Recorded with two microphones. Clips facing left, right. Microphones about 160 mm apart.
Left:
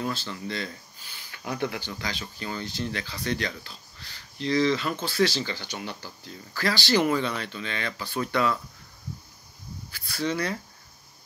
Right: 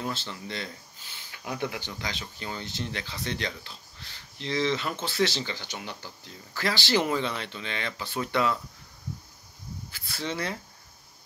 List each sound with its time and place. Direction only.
0.0 s speech: 25° right (ahead or behind)
1.4 s speech: 10° right (ahead or behind)
1.8 s speech: 20° right (ahead or behind)
9.8 s speech: 25° right (ahead or behind)